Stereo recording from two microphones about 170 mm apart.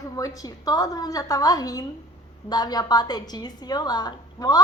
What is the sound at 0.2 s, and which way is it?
Speech, 20° left (ahead or behind).